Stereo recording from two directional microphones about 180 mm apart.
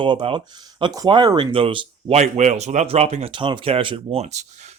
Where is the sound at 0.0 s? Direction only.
25° right (ahead or behind).